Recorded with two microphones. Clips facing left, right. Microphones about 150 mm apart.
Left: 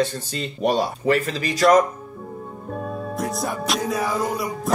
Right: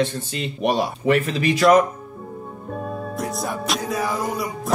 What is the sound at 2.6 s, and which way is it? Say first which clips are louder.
Music: even; centre (ahead or behind).